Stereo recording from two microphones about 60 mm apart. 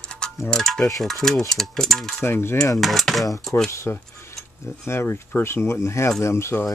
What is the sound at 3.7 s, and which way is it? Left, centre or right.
Speech, left.